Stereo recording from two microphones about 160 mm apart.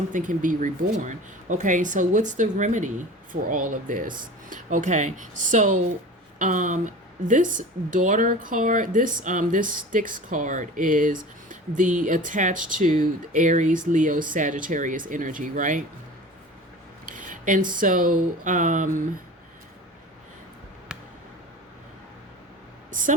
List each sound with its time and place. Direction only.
0.1 s speech: 55° right (ahead or behind)
17.1 s speech: 55° right (ahead or behind)
22.9 s speech: 55° right (ahead or behind)